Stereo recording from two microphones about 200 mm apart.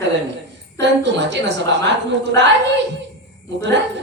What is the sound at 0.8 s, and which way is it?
Speech, 60° right (ahead or behind).